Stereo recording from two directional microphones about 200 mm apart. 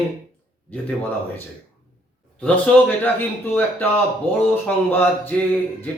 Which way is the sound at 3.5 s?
10° left (ahead or behind).